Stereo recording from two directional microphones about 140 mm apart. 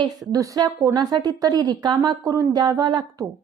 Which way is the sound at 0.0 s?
25° right (ahead or behind).